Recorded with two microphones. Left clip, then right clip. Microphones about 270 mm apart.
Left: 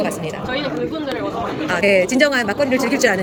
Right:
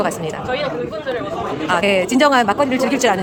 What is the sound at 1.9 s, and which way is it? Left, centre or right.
Speech, centre.